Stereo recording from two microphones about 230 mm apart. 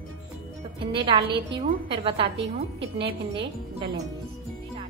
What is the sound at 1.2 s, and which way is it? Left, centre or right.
Speech, right.